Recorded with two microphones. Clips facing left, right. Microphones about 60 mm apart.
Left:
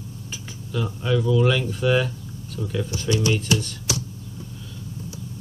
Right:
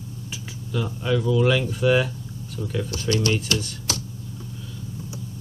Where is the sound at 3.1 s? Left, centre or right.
Centre.